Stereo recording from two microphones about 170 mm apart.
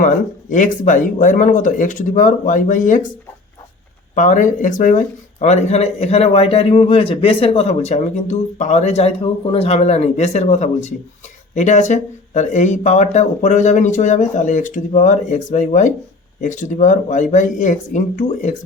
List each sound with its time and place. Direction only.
0.5 s speech: 50° left (ahead or behind)
4.1 s speech: 50° left (ahead or behind)